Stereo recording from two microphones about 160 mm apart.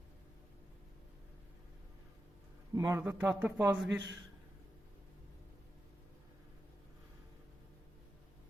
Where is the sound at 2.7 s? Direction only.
20° right (ahead or behind).